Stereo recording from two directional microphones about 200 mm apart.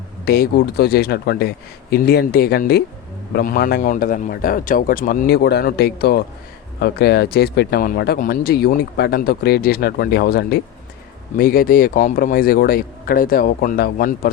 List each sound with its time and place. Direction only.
0.3 s speech: 50° left (ahead or behind)